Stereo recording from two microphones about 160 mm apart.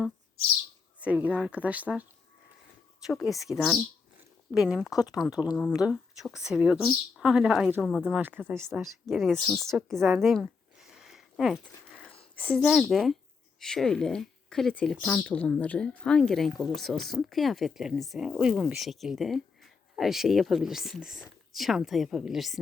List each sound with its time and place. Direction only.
1.0 s speech: 10° right (ahead or behind)
4.9 s speech: 25° left (ahead or behind)
5.1 s speech: 5° right (ahead or behind)
8.2 s speech: 10° right (ahead or behind)
8.7 s speech: centre (ahead or behind)
10.2 s a sound: centre (ahead or behind)
12.5 s speech: centre (ahead or behind)